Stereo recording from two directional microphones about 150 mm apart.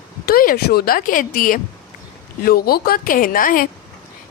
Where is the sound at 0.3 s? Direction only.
85° left; by 1.5 s 65° left (ahead or behind).